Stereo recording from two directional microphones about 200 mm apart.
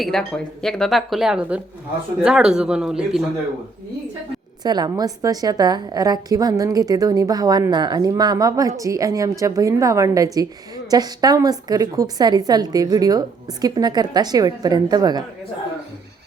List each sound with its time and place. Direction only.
0.0 s speech: centre (ahead or behind)
4.6 s a woman's voice: 20° right (ahead or behind)